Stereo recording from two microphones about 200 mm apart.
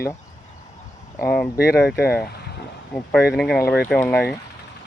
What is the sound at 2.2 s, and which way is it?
Vehicle, 55° left (ahead or behind).